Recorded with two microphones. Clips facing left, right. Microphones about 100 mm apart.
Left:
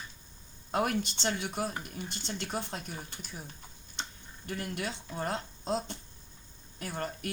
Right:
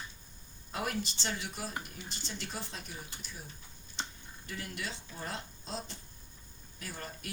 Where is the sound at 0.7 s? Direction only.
55° left (ahead or behind).